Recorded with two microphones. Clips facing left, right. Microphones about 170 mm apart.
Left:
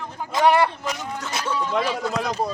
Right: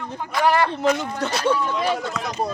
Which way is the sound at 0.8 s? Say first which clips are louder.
Right 8 dB; 75° right (ahead or behind).